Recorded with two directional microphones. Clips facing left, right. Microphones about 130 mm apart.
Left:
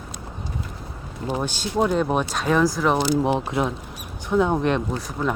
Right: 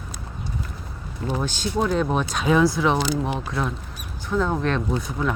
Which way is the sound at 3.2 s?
20° left (ahead or behind).